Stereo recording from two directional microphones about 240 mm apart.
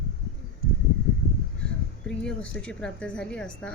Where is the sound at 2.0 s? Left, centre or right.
Centre.